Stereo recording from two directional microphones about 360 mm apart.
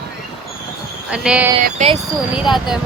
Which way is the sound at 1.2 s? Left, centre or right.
Centre.